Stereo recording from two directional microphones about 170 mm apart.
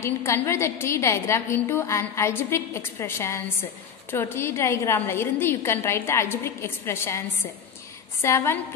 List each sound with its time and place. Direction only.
0.0 s a woman's voice: 15° left (ahead or behind)